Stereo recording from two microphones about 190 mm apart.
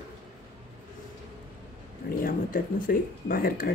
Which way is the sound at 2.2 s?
50° left (ahead or behind).